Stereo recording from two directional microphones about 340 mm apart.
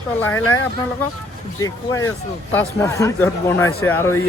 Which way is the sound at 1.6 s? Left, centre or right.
Centre.